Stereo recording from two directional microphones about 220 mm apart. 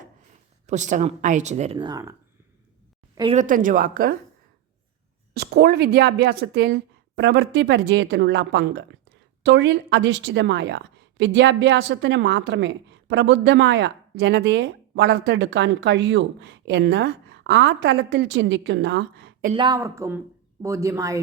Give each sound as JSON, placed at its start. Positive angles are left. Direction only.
{"t": 0.7, "sound": "speech", "side_deg": -35}
{"t": 3.3, "sound": "speech", "side_deg": -35}
{"t": 5.3, "sound": "a woman's voice", "side_deg": -50}
{"t": 19.5, "sound": "speech", "side_deg": -20}